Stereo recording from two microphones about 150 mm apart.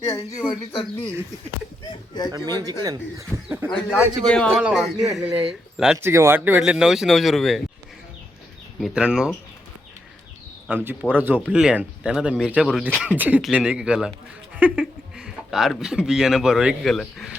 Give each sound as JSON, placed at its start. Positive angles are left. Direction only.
{"t": 1.9, "sound": "speech", "side_deg": 30}
{"t": 2.3, "sound": "speech", "side_deg": -25}
{"t": 3.7, "sound": "speech", "side_deg": 5}
{"t": 6.0, "sound": "speech", "side_deg": -15}
{"t": 8.8, "sound": "speech", "side_deg": -5}
{"t": 10.7, "sound": "speech", "side_deg": -15}